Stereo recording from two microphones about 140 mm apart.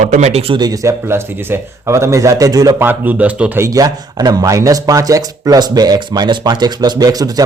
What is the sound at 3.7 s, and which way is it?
Speech, 25° right (ahead or behind).